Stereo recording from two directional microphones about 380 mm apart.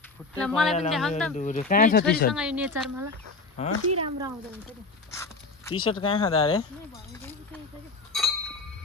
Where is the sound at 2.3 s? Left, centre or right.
Centre.